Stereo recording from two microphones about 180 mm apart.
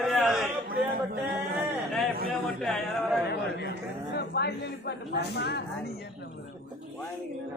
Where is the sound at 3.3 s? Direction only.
65° left (ahead or behind).